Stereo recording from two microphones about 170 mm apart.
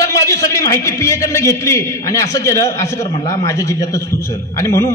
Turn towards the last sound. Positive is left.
turn(degrees=15)  # may be behind; listen again after turning